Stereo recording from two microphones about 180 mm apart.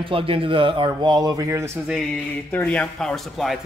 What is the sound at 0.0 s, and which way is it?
A man's voice, 30° right (ahead or behind).